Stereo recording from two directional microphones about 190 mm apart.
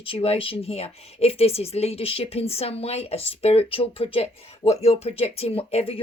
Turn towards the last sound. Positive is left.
turn(degrees=30)  # may be behind; listen again after turning